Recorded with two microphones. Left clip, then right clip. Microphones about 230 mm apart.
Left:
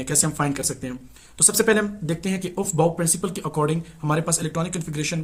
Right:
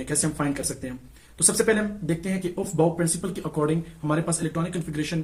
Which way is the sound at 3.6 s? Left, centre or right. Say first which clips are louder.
Left 1 dB; left.